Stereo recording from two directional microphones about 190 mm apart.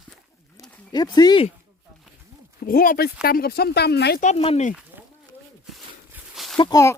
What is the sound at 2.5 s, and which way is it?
Speech, 50° left (ahead or behind).